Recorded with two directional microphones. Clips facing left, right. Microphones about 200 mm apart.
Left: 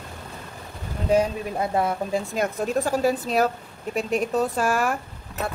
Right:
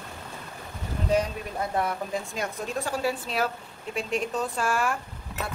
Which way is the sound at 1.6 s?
25° left (ahead or behind).